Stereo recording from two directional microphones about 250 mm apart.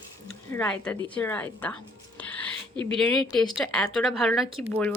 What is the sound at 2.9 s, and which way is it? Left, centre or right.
A woman's voice, centre.